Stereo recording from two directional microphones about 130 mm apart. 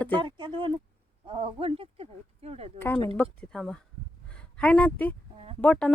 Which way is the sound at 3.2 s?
5° left (ahead or behind).